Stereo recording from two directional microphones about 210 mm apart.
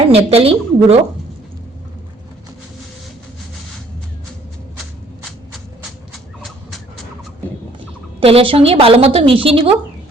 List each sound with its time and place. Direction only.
0.1 s a woman's voice: 30° right (ahead or behind)
6.4 s a sound: centre (ahead or behind)
8.2 s a woman's voice: 25° right (ahead or behind)